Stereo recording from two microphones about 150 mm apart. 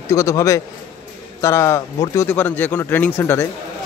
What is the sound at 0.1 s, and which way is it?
A man's voice, 20° left (ahead or behind).